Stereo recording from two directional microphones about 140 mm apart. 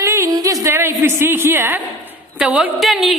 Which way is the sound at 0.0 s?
20° right (ahead or behind).